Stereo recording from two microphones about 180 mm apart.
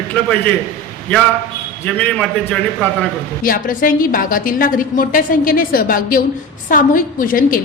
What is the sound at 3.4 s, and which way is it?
A woman's voice, 50° left (ahead or behind).